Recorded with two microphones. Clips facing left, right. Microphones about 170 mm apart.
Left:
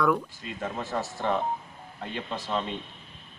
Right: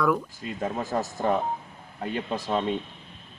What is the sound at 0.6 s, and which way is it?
Speech, 40° right (ahead or behind).